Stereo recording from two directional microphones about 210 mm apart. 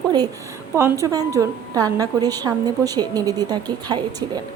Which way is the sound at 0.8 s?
15° right (ahead or behind).